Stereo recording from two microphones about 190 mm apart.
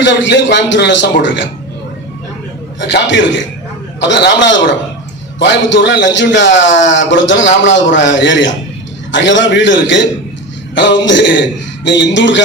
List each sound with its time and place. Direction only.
0.0 s a man's voice: 70° left (ahead or behind)
2.8 s a man's voice: 70° left (ahead or behind)